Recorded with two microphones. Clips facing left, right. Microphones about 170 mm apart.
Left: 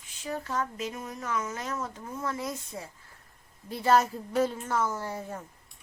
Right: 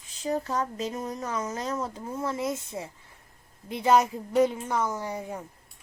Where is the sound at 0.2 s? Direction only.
35° right (ahead or behind); by 5.5 s 15° right (ahead or behind).